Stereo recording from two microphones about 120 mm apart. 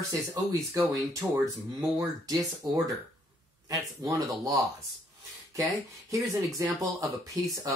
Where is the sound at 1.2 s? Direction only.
15° right (ahead or behind).